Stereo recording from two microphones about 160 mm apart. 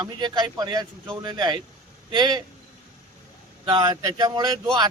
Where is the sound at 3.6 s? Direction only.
25° right (ahead or behind).